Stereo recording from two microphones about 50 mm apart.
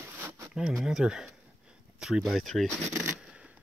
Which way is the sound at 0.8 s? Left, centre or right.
Centre.